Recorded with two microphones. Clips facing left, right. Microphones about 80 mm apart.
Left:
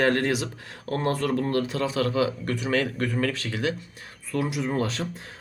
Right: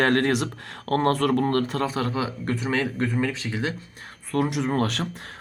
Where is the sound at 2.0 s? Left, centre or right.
Right.